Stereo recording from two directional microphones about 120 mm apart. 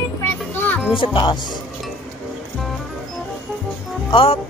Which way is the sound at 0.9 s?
45° left (ahead or behind).